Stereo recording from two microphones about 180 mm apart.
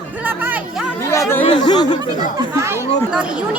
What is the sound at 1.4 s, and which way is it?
Speech, 25° left (ahead or behind).